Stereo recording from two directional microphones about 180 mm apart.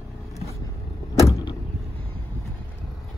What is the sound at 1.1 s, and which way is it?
Vehicle, 15° left (ahead or behind).